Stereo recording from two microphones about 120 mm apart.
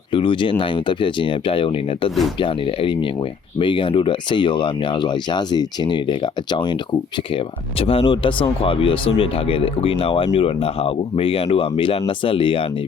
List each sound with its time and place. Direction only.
0.1 s speech: 45° left (ahead or behind)